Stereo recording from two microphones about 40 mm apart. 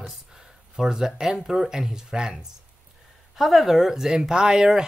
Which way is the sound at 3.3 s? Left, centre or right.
Centre.